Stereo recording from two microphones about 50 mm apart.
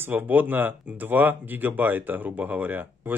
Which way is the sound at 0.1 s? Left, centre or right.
Right.